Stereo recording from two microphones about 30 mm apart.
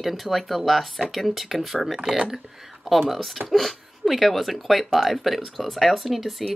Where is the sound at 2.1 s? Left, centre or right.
Centre.